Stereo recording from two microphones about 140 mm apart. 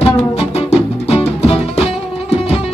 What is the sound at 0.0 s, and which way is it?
Music, 45° left (ahead or behind).